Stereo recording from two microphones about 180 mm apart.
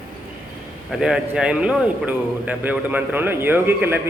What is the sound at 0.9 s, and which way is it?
A man's voice, 5° right (ahead or behind).